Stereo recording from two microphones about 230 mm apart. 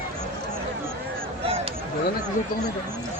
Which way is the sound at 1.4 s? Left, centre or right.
Right.